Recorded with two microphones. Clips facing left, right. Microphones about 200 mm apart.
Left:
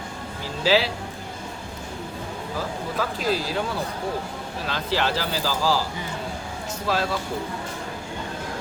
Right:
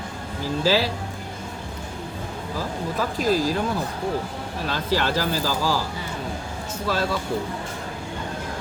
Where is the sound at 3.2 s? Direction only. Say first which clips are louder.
Right 6 dB; 45° right (ahead or behind).